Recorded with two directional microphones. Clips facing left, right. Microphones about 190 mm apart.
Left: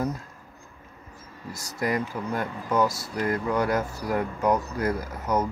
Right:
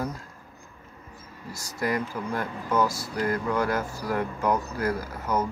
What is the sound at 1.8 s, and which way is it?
Speech, 20° left (ahead or behind).